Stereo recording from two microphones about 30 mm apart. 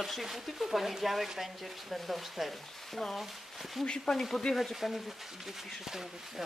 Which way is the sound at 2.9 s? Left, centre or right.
Centre.